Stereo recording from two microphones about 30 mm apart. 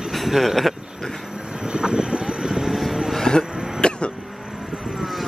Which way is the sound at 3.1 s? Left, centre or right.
Left.